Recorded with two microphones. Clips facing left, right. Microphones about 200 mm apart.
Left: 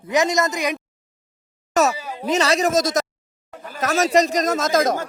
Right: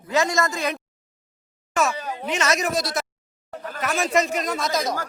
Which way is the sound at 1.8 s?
40° left (ahead or behind).